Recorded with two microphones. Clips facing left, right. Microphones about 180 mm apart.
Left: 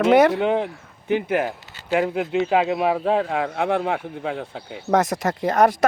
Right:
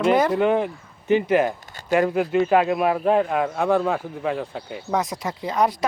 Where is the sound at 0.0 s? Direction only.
75° left (ahead or behind).